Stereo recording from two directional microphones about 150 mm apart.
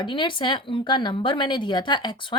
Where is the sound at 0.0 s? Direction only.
30° left (ahead or behind).